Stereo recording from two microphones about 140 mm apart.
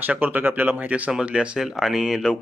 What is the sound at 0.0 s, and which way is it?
Speech, 10° right (ahead or behind).